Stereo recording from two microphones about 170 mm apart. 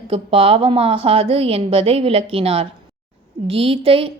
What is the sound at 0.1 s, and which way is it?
A woman's voice, 35° right (ahead or behind).